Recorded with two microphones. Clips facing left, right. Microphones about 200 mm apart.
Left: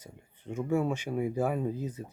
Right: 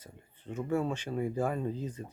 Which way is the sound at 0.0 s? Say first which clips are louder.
Left 2 dB; 10° left (ahead or behind).